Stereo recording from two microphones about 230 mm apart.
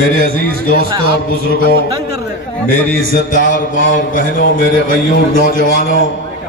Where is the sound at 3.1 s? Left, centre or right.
Left.